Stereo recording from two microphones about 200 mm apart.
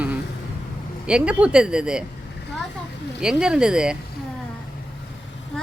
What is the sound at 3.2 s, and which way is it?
Speech, 5° right (ahead or behind).